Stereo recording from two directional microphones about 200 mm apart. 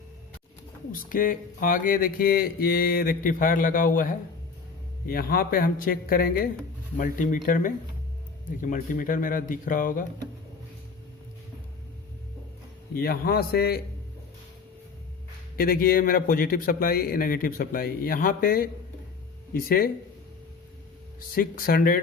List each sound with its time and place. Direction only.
0.9 s speech: 45° left (ahead or behind)
13.0 s speech: 50° left (ahead or behind)
15.5 s speech: 45° left (ahead or behind)
21.3 s speech: 45° left (ahead or behind)